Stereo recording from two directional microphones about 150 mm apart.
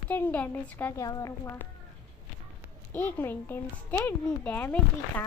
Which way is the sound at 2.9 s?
15° left (ahead or behind).